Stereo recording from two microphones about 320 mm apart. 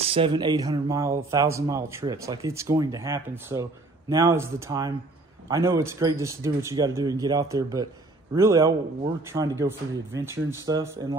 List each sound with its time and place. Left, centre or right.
0.1 s a man's voice: centre